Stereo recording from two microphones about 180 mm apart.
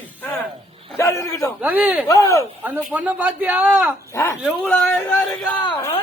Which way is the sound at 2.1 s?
15° left (ahead or behind).